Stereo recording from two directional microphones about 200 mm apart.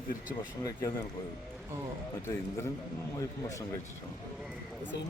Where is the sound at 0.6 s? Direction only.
15° left (ahead or behind).